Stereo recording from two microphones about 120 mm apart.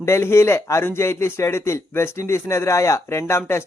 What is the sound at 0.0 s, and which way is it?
Speech, 20° left (ahead or behind).